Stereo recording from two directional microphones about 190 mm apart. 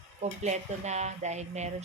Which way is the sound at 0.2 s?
35° right (ahead or behind).